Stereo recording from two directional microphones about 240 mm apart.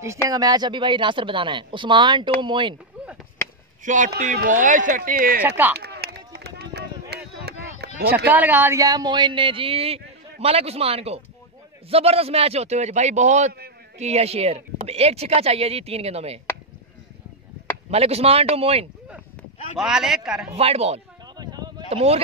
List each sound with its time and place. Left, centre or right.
0.3 s speech: centre
3.8 s speech: right
5.8 s chop: right
8.3 s speech: centre; by 16.3 s right
17.9 s speech: right
19.8 s a man's voice: centre
20.5 s a sound: right